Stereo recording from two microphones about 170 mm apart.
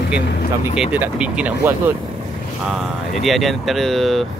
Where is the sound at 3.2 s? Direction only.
Centre (ahead or behind).